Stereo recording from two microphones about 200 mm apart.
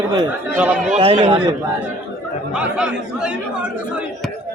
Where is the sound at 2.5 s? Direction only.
5° right (ahead or behind).